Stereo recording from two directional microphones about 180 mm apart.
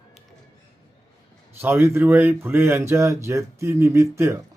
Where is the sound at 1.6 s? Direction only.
15° right (ahead or behind).